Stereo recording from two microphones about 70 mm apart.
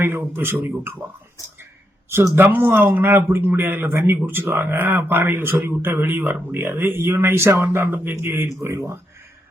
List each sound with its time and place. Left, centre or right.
0.0 s a man's voice: right
2.3 s a man's voice: right
8.6 s speech: right